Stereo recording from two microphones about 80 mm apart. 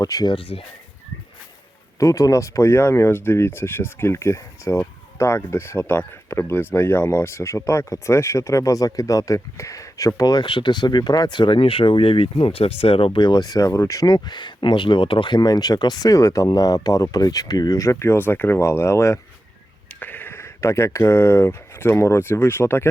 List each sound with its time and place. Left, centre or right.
0.0 s speech: left
2.0 s speech: left
10.4 s speech: left
13.1 s speech: left
14.1 s speech: left
20.0 s speech: left